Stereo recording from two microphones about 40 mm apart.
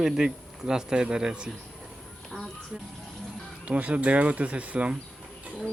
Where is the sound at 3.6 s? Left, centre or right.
Right.